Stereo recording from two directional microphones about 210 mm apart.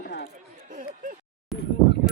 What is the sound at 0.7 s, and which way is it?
Speech, 40° right (ahead or behind).